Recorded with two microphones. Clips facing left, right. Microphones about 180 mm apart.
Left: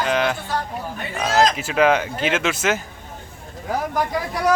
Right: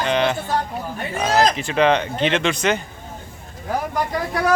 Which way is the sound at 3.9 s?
Centre (ahead or behind).